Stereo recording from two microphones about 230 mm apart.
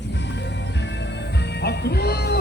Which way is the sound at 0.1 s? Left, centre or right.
Left.